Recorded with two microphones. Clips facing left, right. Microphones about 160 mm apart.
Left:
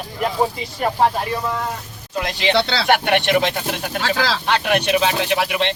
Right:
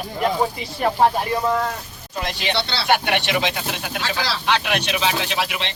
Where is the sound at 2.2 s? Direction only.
75° left (ahead or behind).